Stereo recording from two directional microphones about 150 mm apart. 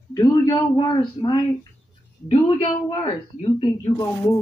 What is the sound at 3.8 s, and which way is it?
Speech, 20° left (ahead or behind).